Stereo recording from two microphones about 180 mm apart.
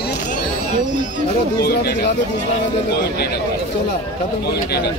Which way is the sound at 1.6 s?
60° left (ahead or behind).